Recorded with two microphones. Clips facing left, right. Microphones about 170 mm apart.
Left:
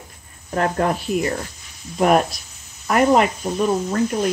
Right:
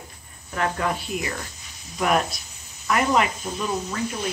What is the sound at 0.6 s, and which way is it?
Speech, 45° left (ahead or behind).